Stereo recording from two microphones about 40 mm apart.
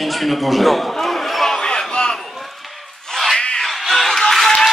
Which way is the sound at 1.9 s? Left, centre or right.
Left.